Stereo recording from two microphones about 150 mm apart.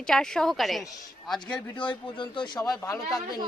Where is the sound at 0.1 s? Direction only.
5° left (ahead or behind).